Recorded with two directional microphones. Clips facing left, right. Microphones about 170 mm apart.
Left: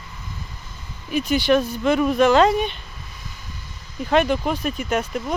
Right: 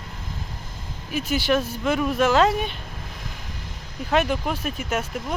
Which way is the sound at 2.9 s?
55° right (ahead or behind).